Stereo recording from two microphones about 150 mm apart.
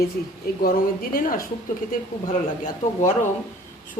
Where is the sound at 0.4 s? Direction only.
90° left.